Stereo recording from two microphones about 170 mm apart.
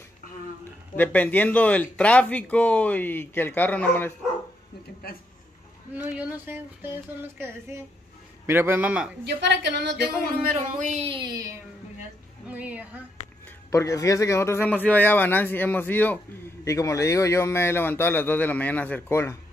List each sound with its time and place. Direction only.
0.9 s speech: 10° left (ahead or behind)
5.9 s speech: 10° right (ahead or behind)
9.2 s speech: 90° right
10.8 s speech: 45° right (ahead or behind)
11.1 s speech: 25° right (ahead or behind)
12.4 s a woman's voice: 10° right (ahead or behind)
13.7 s speech: 20° left (ahead or behind)